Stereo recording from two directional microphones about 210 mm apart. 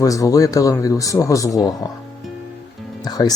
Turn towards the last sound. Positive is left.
turn(degrees=20)  # may be behind; listen again after turning